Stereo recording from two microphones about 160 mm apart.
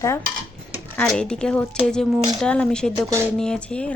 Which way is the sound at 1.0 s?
5° left (ahead or behind).